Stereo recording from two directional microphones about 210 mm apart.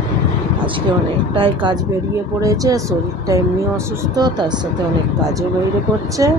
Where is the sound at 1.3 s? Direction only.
25° right (ahead or behind).